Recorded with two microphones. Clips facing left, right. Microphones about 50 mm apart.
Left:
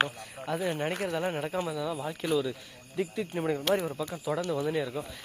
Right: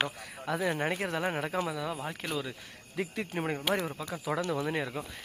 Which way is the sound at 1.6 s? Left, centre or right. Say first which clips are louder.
Left 1 dB; right.